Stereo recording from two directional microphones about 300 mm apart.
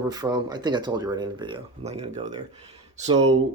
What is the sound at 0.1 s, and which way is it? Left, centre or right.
Speech, centre.